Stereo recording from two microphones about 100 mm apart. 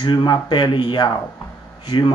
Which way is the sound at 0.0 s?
50° left (ahead or behind).